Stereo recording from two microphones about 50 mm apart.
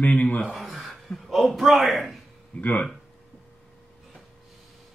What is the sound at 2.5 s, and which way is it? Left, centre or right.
Speech, left.